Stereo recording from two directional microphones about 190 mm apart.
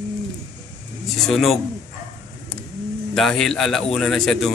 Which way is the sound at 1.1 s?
Centre (ahead or behind).